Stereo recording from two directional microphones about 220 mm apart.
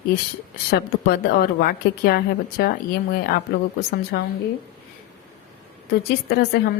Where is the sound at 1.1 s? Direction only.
45° left (ahead or behind).